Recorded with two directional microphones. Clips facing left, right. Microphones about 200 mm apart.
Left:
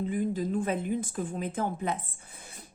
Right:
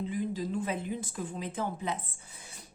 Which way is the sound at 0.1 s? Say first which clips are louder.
Left 4 dB; 50° left (ahead or behind).